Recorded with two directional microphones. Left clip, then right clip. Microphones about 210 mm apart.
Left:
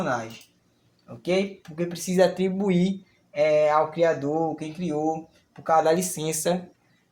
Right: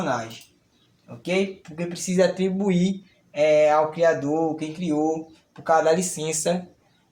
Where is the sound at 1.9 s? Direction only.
30° left (ahead or behind).